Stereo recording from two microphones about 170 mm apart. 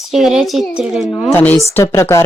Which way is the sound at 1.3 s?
10° left (ahead or behind).